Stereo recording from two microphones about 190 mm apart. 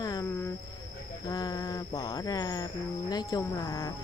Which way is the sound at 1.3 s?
20° left (ahead or behind).